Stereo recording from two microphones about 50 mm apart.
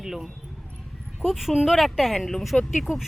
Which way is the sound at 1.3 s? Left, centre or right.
Centre.